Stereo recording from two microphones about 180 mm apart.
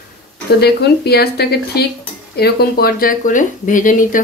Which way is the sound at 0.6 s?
60° left (ahead or behind).